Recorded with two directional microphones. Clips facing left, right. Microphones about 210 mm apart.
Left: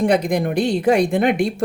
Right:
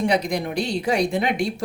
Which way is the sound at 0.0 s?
50° left (ahead or behind).